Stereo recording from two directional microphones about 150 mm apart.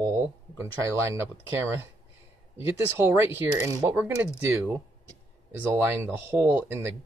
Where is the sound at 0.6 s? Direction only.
20° right (ahead or behind).